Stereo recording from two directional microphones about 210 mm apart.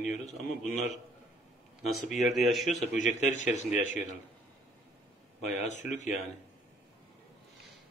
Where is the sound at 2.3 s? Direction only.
Centre (ahead or behind).